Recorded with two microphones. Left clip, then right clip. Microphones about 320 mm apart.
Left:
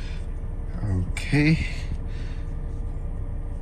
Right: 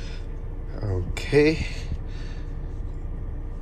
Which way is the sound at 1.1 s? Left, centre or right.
Centre.